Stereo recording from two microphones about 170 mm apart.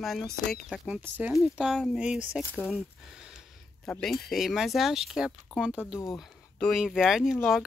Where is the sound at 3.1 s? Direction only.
5° right (ahead or behind).